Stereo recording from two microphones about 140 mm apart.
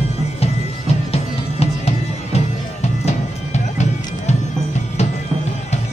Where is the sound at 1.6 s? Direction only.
45° left (ahead or behind).